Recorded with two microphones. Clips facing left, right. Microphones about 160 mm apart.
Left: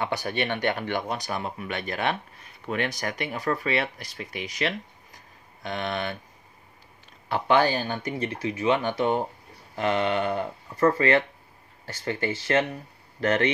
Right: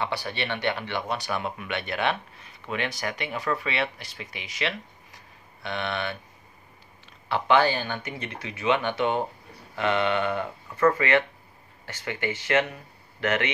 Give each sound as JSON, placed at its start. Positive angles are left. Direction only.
{"t": 0.0, "sound": "speech", "side_deg": 45}
{"t": 7.2, "sound": "speech", "side_deg": 45}